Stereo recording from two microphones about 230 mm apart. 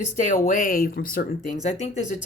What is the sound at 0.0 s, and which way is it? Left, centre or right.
Speech, left.